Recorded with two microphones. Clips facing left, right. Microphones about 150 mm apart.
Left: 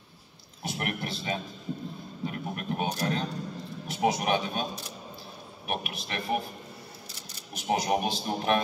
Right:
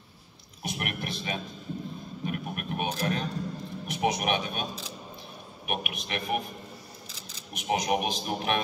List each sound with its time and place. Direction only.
0.7 s a sound: 30° left (ahead or behind)
3.8 s speech: 30° left (ahead or behind)
5.7 s a man's voice: 35° left (ahead or behind)
7.5 s a man's voice: 30° left (ahead or behind)